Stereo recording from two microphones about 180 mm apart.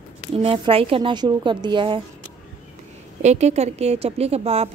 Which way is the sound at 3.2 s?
40° right (ahead or behind).